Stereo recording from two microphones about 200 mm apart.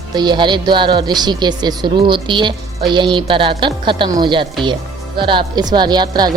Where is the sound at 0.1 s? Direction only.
20° right (ahead or behind).